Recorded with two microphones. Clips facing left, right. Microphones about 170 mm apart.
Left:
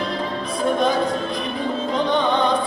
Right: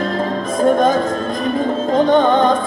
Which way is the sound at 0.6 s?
45° right (ahead or behind).